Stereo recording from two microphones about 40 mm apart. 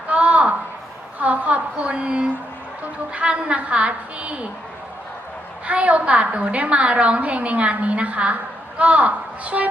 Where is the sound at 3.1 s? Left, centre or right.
Right.